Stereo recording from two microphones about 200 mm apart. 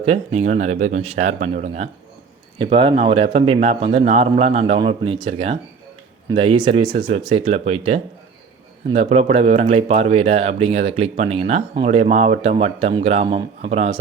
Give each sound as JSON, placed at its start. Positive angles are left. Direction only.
{"t": 0.0, "sound": "speech", "side_deg": -35}